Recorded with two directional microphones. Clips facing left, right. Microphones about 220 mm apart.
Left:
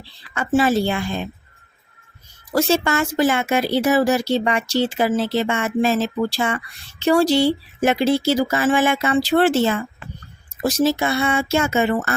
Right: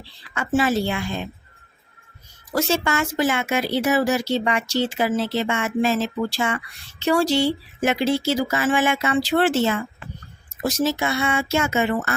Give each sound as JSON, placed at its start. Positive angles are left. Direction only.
{"t": 0.3, "sound": "speech", "side_deg": 35}
{"t": 2.6, "sound": "speech", "side_deg": 35}